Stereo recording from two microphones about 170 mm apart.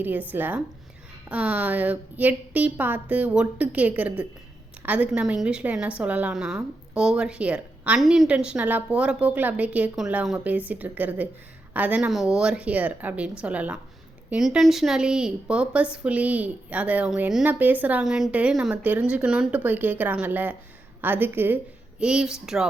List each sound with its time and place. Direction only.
0.0 s a woman's voice: 10° right (ahead or behind)